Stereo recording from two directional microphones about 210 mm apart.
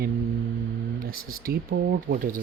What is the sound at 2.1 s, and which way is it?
Speech, 55° right (ahead or behind).